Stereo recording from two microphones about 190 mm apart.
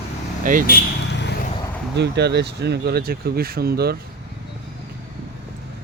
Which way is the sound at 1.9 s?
65° right (ahead or behind).